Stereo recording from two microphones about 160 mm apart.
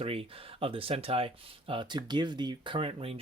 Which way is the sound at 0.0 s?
35° right (ahead or behind).